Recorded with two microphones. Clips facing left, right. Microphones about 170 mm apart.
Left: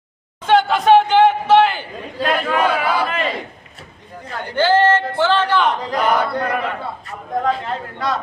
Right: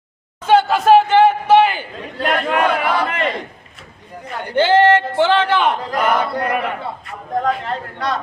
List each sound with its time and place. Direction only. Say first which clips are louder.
0.4 s a sound: right 1 dB; 5° right (ahead or behind)
2.1 s speech: even; 10° left (ahead or behind)
4.5 s a man's voice: right 2 dB; 15° right (ahead or behind); by 8.2 s centre (ahead or behind)